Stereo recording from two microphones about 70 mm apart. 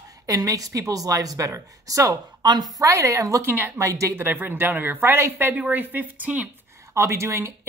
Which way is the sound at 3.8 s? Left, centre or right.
Right.